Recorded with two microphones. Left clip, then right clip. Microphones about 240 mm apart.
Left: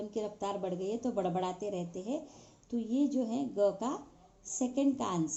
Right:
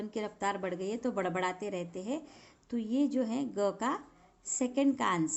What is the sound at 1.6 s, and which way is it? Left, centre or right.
Speech, right.